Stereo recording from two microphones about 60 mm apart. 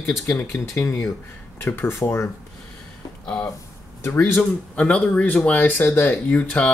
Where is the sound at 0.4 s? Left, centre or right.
Left.